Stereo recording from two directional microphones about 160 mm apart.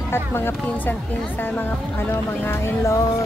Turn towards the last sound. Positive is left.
turn(degrees=20)  # may be behind; listen again after turning